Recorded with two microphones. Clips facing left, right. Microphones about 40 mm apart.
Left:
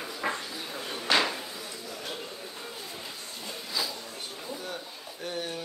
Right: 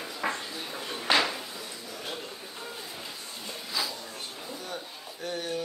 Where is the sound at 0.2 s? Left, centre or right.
Centre.